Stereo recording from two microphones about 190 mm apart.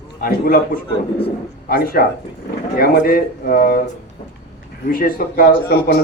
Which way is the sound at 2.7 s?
50° left (ahead or behind).